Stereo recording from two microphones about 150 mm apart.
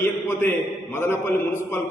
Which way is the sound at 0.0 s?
15° left (ahead or behind).